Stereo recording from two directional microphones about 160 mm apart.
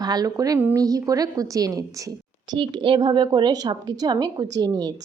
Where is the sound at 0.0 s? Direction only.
25° right (ahead or behind).